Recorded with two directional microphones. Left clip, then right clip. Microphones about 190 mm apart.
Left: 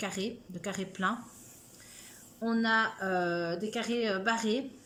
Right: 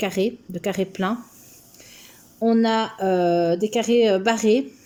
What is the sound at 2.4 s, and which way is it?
Speech, 40° right (ahead or behind).